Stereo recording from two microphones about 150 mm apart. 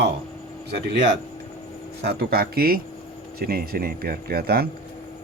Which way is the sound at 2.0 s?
90° right.